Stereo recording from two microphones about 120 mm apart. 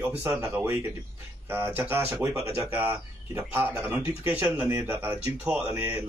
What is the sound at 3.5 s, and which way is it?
Speech, 10° right (ahead or behind).